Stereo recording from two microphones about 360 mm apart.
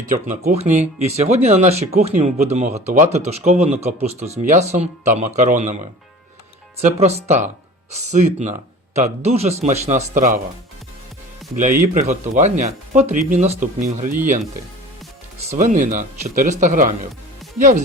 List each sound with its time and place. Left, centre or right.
0.3 s speech: centre
11.9 s speech: centre
15.4 s speech: centre